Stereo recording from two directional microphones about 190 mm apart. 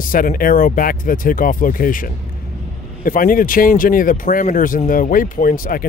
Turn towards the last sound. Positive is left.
turn(degrees=45)  # may be behind; listen again after turning